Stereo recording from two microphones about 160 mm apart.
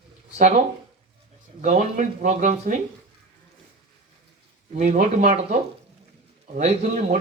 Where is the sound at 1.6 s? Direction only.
50° right (ahead or behind).